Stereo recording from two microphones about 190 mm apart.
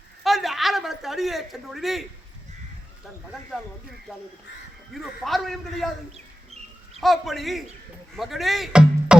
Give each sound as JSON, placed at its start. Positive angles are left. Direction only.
{"t": 0.3, "sound": "a sound", "side_deg": 0}
{"t": 4.9, "sound": "a man's voice", "side_deg": 0}
{"t": 6.1, "sound": "bird", "side_deg": -35}
{"t": 7.0, "sound": "a man's voice", "side_deg": 0}